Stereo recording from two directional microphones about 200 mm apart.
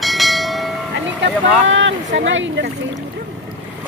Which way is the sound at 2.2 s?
65° right (ahead or behind).